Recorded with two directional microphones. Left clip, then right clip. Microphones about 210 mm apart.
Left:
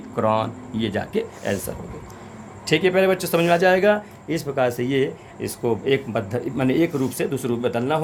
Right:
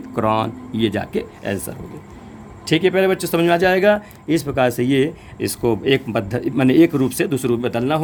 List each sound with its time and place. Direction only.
0.2 s speech: 35° right (ahead or behind)